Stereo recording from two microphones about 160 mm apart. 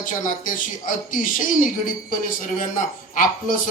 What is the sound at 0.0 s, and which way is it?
Speech, 55° left (ahead or behind).